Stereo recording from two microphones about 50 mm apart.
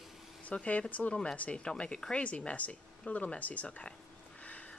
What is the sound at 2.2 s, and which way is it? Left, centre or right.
Speech, left.